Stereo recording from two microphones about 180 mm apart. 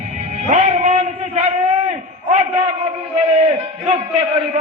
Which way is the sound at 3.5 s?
35° right (ahead or behind).